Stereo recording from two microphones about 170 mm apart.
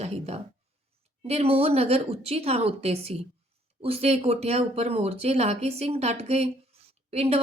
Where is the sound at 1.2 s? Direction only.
35° right (ahead or behind).